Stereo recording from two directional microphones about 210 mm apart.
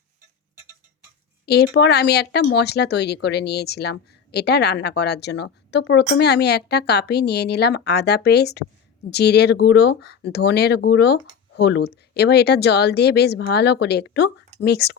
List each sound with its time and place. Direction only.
1.5 s speech: 50° left (ahead or behind)